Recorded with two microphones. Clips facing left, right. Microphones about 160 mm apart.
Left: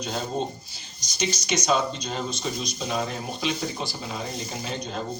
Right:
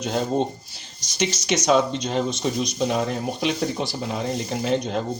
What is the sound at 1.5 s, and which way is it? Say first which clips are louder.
Speech: right 5 dB; 75° right (ahead or behind).